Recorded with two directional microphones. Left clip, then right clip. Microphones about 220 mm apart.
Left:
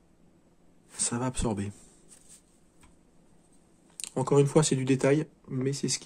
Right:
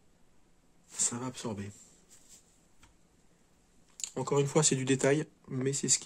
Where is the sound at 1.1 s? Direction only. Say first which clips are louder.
Left 7 dB; 15° left (ahead or behind).